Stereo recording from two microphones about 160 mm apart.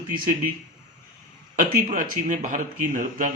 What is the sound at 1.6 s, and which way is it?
Speech, 55° right (ahead or behind).